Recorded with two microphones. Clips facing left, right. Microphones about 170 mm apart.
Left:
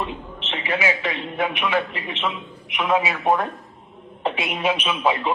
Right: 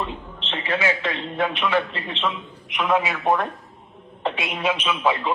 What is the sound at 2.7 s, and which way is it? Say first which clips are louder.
Speech: even; 10° left (ahead or behind).